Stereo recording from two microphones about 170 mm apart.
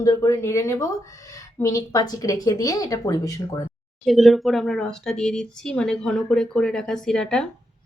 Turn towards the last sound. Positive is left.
turn(degrees=5)  # may be behind; listen again after turning